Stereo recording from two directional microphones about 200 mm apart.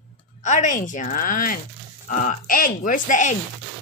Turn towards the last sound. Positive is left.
turn(degrees=40)  # may be behind; listen again after turning